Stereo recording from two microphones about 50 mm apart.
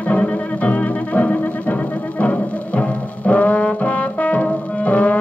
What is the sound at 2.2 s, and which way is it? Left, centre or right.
Brass instrument, left.